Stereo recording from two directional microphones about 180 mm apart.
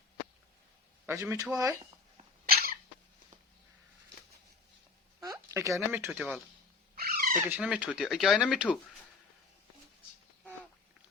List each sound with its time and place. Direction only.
1.0 s speech: 15° right (ahead or behind)
2.5 s cough: 55° right (ahead or behind)
5.2 s a sound: 20° right (ahead or behind)
6.1 s speech: 5° right (ahead or behind)
6.9 s a sound: 55° right (ahead or behind)
7.4 s speech: 5° right (ahead or behind)